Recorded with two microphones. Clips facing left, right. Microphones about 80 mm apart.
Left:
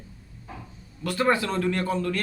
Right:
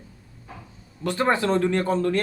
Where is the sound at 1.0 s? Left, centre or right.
Right.